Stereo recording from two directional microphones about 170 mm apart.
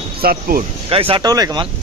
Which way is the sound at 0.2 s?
60° right (ahead or behind).